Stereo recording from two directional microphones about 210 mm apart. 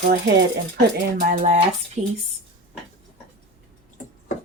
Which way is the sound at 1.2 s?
35° right (ahead or behind).